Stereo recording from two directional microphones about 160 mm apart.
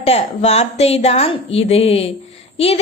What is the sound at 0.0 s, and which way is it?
A woman's voice, 40° left (ahead or behind).